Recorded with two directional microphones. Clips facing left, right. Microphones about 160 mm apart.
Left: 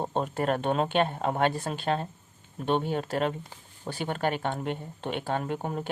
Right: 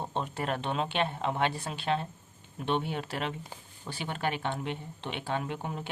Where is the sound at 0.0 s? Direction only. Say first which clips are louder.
Left 5 dB; 45° left (ahead or behind).